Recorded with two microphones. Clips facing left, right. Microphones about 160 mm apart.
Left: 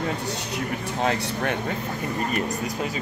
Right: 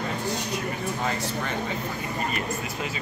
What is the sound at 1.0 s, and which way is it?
Speech, 70° left (ahead or behind).